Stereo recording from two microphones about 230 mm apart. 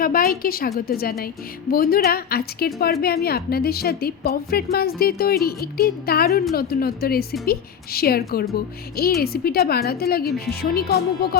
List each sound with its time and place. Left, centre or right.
0.0 s a woman's voice: left